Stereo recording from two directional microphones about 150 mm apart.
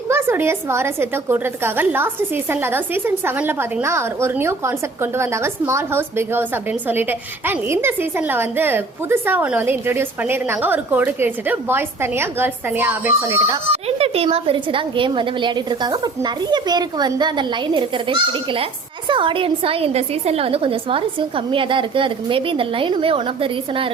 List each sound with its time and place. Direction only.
0.1 s a woman's voice: 15° right (ahead or behind)
13.8 s a woman's voice: 40° right (ahead or behind)